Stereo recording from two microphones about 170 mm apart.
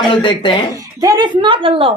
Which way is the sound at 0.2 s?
30° left (ahead or behind).